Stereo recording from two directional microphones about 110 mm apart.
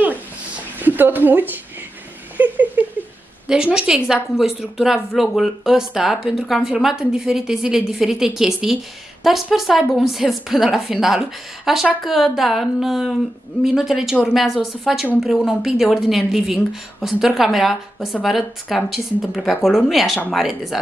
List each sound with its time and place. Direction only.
0.7 s speech: 15° right (ahead or behind)
2.3 s a sound: 15° right (ahead or behind)
3.4 s a woman's voice: 5° right (ahead or behind)